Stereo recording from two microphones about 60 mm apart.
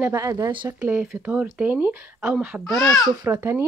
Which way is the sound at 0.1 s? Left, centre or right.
Right.